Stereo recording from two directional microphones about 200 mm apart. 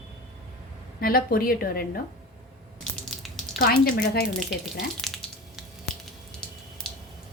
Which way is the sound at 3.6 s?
50° left (ahead or behind).